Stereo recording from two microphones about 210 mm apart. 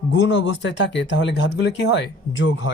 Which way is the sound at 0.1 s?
60° left (ahead or behind).